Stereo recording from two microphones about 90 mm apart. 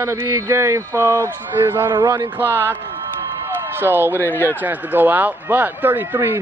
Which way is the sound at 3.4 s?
25° right (ahead or behind).